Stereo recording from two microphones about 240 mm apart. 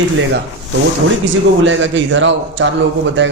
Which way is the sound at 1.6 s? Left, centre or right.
Right.